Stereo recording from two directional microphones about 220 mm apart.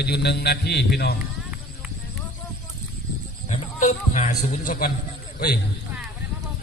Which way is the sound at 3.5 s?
35° left (ahead or behind).